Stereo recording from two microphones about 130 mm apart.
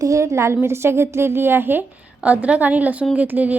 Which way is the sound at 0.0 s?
25° right (ahead or behind).